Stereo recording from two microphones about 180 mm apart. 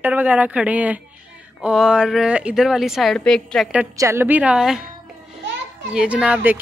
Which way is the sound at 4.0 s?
15° right (ahead or behind).